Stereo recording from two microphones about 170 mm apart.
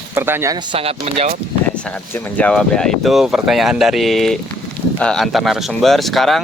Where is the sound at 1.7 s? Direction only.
5° left (ahead or behind).